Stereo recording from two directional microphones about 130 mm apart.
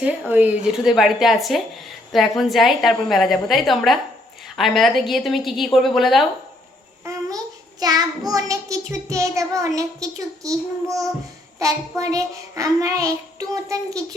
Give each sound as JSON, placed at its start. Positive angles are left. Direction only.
{"t": 0.0, "sound": "a woman's voice", "side_deg": -10}
{"t": 7.0, "sound": "child singing", "side_deg": -25}